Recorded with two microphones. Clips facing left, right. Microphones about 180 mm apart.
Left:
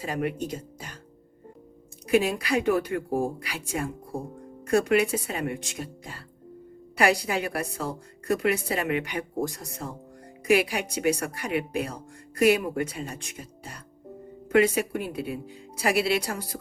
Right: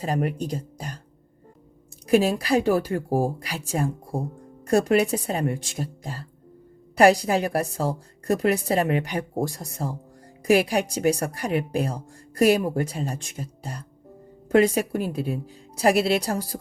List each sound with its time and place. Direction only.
0.0 s speech: 40° right (ahead or behind)
2.0 s a woman's voice: 35° right (ahead or behind)
4.6 s a woman's voice: 35° right (ahead or behind)